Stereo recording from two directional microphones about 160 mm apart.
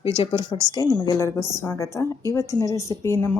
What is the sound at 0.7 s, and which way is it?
A woman's voice, 25° left (ahead or behind).